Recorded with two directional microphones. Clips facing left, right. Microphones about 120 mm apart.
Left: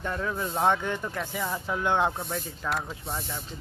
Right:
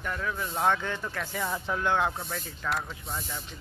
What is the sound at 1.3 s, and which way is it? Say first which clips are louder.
Speech: right 1 dB; centre (ahead or behind).